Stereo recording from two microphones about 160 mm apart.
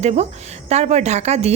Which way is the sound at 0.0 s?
40° right (ahead or behind).